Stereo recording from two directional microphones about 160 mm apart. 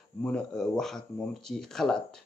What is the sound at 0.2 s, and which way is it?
Speech, 5° left (ahead or behind).